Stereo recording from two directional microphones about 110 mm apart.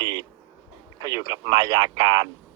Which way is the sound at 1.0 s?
40° right (ahead or behind).